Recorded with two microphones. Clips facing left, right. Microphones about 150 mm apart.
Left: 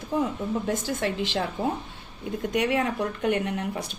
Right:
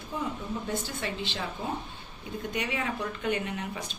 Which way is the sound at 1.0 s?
70° left (ahead or behind).